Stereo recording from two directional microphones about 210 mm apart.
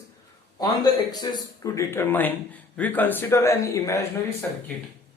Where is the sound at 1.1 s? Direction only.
20° left (ahead or behind).